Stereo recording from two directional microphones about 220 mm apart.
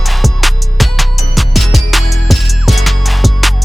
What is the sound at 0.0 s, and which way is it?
Music, centre (ahead or behind).